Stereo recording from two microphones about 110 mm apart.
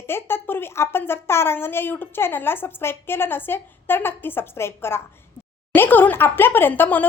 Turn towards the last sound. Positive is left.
turn(degrees=15)  # may be behind; listen again after turning